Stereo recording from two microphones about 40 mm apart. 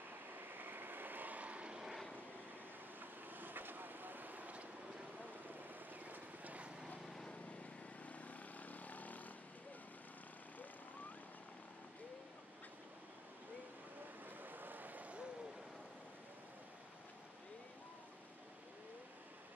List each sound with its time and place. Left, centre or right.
0.4 s vehicle: right
3.0 s vehicle: right
6.0 s vehicle: right
8.0 s vehicle: left
14.2 s vehicle: right